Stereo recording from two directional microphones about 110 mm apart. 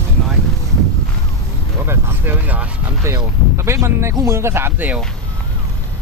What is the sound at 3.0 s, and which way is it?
Speech, 25° right (ahead or behind).